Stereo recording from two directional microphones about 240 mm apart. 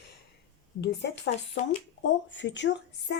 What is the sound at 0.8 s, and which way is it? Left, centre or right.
A woman's voice, left.